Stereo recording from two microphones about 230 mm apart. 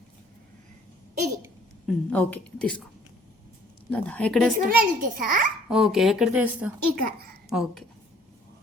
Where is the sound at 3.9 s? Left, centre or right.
Centre.